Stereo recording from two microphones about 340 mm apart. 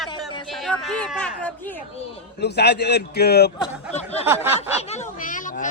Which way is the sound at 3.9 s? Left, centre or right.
Centre.